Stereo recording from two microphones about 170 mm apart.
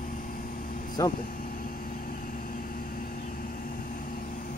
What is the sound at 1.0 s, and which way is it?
Speech, 20° left (ahead or behind).